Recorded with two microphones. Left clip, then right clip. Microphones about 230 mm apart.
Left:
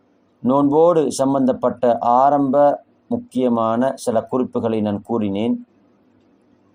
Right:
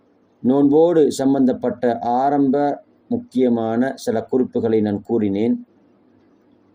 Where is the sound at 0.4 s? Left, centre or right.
Left.